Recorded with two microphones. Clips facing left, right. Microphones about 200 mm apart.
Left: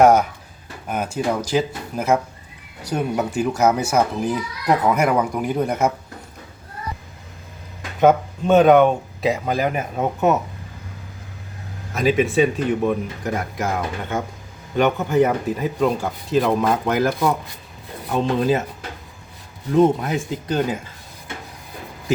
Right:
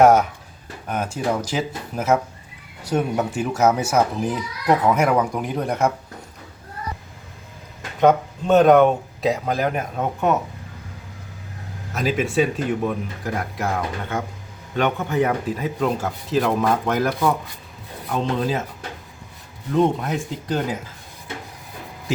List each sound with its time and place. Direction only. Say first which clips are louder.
0.0 s speech: even; centre (ahead or behind)
8.0 s speech: left 1 dB; centre (ahead or behind)
11.9 s speech: left 3 dB; centre (ahead or behind)
19.7 s speech: left 3 dB; 5° left (ahead or behind)